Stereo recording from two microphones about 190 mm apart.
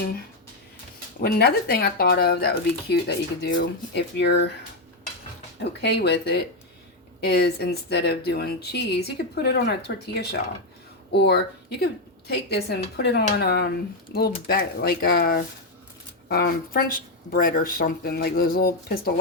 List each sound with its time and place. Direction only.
1.2 s speech: 55° left (ahead or behind)
5.8 s speech: 60° left (ahead or behind)